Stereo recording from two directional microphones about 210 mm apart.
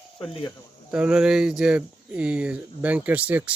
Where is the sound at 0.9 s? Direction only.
5° right (ahead or behind).